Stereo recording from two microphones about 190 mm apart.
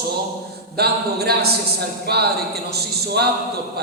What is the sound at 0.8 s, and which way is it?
Speech, 55° right (ahead or behind).